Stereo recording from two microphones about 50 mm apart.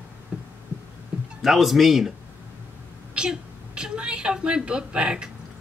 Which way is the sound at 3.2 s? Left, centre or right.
Centre.